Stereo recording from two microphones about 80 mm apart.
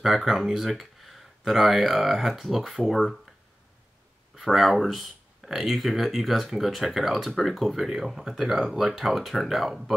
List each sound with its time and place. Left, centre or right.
0.0 s speech: centre
4.4 s speech: centre